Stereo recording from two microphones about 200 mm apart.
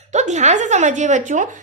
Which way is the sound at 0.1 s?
35° right (ahead or behind).